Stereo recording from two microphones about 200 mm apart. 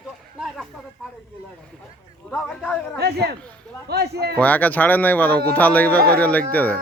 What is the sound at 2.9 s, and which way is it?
Speech, 55° right (ahead or behind).